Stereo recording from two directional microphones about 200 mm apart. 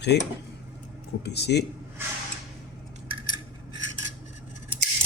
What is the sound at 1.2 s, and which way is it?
Speech, 55° left (ahead or behind).